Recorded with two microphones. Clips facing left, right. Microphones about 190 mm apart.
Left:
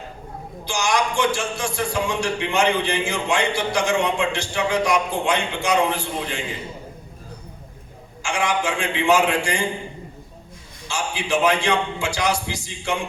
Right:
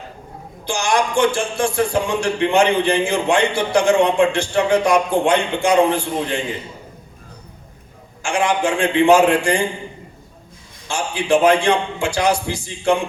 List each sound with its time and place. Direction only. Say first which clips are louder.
0.6 s speech: right 3 dB; 55° right (ahead or behind)
8.2 s speech: right 4 dB; 55° right (ahead or behind)
10.8 s speech: right 6 dB; 55° right (ahead or behind)